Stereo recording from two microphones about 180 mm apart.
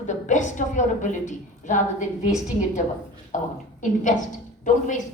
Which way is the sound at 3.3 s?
45° left (ahead or behind).